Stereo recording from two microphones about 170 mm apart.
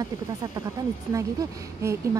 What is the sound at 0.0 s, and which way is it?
Speech, 20° right (ahead or behind).